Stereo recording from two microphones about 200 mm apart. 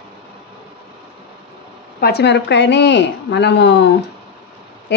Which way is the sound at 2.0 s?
55° left (ahead or behind).